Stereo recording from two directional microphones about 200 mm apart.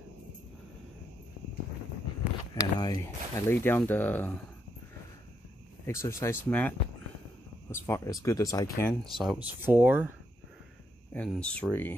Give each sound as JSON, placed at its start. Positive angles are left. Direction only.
{"t": 2.5, "sound": "speech", "side_deg": 20}
{"t": 5.9, "sound": "speech", "side_deg": 15}
{"t": 7.7, "sound": "speech", "side_deg": 15}
{"t": 9.2, "sound": "speech", "side_deg": -5}
{"t": 11.1, "sound": "speech", "side_deg": 5}